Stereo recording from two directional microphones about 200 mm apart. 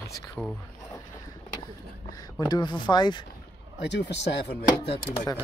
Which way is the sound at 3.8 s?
60° left (ahead or behind).